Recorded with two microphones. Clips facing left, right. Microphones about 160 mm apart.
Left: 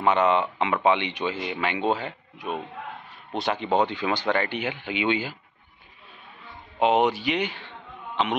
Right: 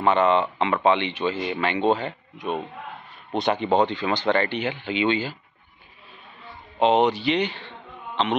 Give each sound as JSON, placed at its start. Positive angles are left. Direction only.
{"t": 0.0, "sound": "speech", "side_deg": 10}
{"t": 6.8, "sound": "speech", "side_deg": 10}